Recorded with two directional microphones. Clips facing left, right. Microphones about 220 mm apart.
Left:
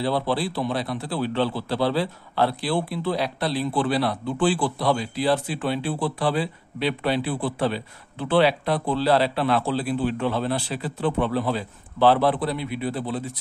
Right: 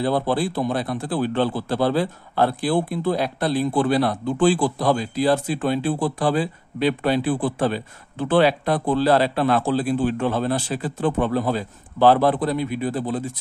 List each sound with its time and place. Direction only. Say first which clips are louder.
0.0 s a man's voice: right 3 dB; 50° right (ahead or behind)